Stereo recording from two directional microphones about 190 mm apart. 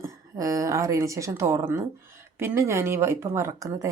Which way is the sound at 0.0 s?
15° right (ahead or behind).